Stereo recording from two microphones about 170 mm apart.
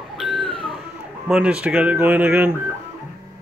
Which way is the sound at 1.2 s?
5° right (ahead or behind).